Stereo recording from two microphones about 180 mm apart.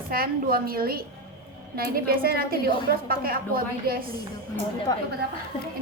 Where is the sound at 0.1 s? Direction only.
55° right (ahead or behind).